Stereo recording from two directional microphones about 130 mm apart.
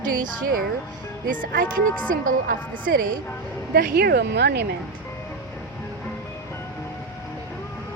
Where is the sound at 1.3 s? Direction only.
90° right.